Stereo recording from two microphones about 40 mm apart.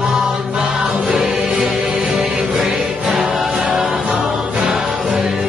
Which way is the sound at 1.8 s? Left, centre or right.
Right.